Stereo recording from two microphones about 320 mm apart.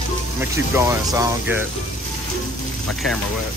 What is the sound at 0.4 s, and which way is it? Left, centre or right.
Speech, centre.